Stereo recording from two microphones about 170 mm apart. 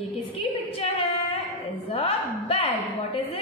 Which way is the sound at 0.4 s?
35° left (ahead or behind).